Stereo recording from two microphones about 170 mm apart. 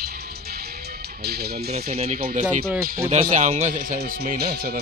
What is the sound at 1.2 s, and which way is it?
Speech, 70° right (ahead or behind).